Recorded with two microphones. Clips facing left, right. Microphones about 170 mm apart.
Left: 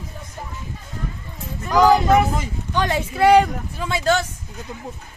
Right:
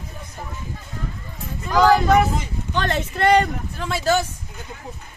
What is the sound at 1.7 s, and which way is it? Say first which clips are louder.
Speech: left 1 dB; 15° left (ahead or behind).